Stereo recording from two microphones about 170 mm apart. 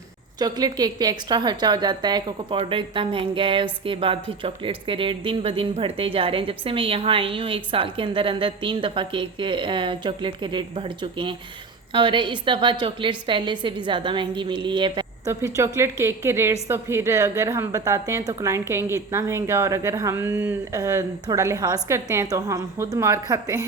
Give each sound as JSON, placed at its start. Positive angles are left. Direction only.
{"t": 0.3, "sound": "a woman's voice", "side_deg": -25}
{"t": 15.3, "sound": "a woman's voice", "side_deg": -15}